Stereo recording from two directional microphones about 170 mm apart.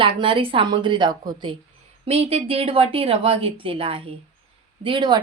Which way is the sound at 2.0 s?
35° right (ahead or behind).